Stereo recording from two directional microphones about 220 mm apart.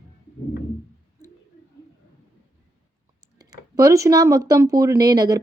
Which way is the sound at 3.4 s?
15° right (ahead or behind).